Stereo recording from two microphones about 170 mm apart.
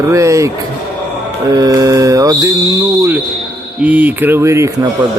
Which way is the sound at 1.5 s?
20° right (ahead or behind).